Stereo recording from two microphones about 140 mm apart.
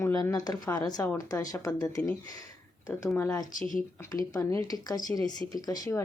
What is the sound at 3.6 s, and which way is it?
Speech, 70° left (ahead or behind).